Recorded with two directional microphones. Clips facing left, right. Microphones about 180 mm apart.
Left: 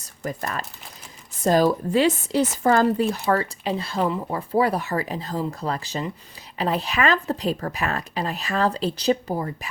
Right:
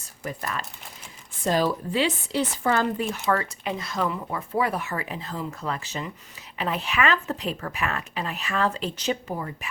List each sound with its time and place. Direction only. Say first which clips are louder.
0.3 s speech: left 3 dB; 40° left (ahead or behind)